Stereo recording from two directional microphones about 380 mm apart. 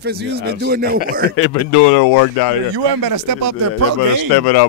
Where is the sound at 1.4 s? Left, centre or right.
Left.